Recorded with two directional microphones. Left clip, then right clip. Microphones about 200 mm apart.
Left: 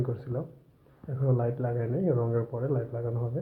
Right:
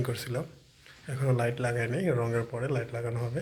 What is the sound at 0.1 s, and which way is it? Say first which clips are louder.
Speech: right 1 dB; 5° right (ahead or behind).